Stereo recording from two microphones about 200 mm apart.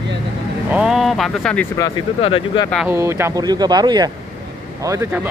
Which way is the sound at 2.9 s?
15° right (ahead or behind).